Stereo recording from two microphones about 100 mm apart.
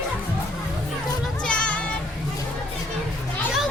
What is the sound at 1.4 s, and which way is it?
Music, 10° left (ahead or behind).